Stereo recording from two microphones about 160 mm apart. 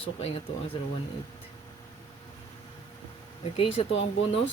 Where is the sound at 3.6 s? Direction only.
35° left (ahead or behind).